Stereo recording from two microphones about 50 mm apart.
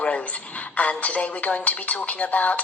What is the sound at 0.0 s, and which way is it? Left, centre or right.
A woman's voice, left.